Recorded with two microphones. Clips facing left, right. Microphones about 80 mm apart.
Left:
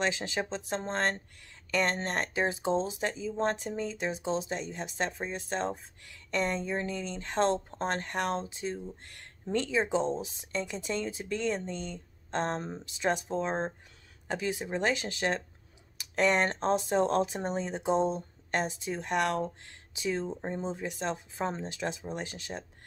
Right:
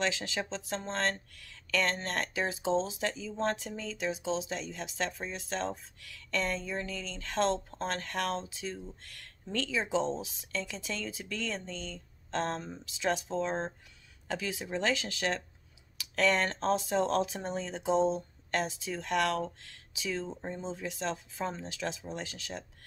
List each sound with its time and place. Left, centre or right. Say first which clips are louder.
0.0 s speech: left 2 dB; left
13.3 s speech: left 1 dB; centre